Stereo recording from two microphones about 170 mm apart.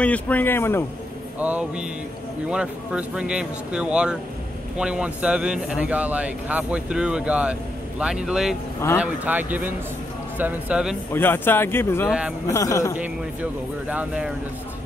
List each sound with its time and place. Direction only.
0.0 s a man's voice: 10° left (ahead or behind)
1.4 s speech: 10° right (ahead or behind)
11.1 s a man's voice: 10° left (ahead or behind)
12.1 s speech: 5° right (ahead or behind)
12.4 s a man's voice: 20° left (ahead or behind)
12.9 s speech: 10° right (ahead or behind)